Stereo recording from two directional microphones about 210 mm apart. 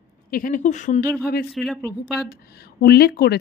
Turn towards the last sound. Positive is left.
turn(degrees=50)  # may be behind; listen again after turning